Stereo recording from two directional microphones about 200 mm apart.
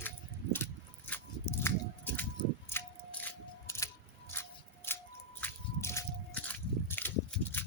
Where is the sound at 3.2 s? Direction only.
15° left (ahead or behind).